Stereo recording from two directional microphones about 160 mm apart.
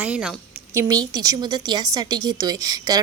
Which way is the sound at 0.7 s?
25° right (ahead or behind).